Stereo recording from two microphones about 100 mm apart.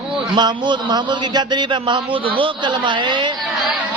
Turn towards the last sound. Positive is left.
turn(degrees=-55)  # may be behind; listen again after turning